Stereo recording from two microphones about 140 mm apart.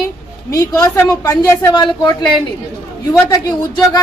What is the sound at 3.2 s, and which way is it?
Speech, 25° left (ahead or behind).